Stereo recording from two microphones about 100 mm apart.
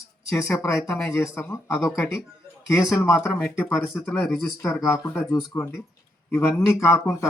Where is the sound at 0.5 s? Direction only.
30° left (ahead or behind).